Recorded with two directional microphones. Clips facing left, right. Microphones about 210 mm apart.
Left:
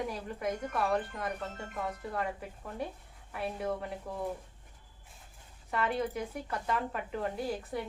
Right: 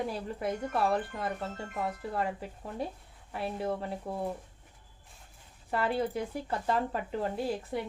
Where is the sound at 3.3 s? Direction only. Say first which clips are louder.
Right 2 dB; 30° right (ahead or behind).